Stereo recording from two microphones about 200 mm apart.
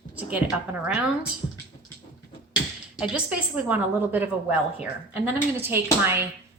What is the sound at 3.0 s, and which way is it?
A woman's voice, 5° right (ahead or behind).